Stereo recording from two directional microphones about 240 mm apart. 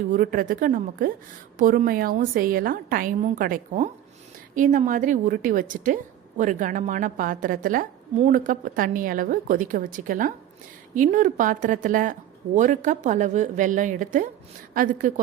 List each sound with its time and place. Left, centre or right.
0.1 s a woman's voice: right